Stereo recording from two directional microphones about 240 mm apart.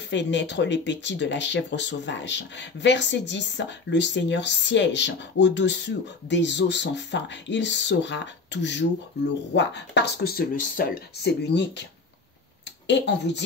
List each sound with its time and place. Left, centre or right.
0.1 s speech: left
12.8 s speech: left